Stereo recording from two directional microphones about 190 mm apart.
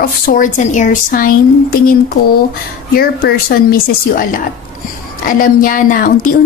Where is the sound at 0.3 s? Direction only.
40° left (ahead or behind).